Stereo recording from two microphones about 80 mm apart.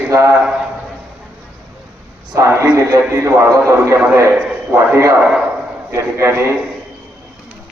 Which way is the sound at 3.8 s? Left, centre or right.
Right.